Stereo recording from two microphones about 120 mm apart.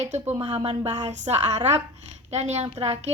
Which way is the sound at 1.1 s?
85° right.